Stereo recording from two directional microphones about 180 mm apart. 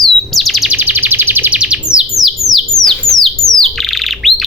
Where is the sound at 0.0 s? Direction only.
Centre (ahead or behind).